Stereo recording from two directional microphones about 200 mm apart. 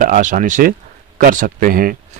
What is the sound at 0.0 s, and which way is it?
Speech, 40° right (ahead or behind).